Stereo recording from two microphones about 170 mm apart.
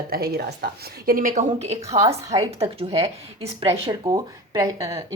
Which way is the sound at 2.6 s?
35° right (ahead or behind).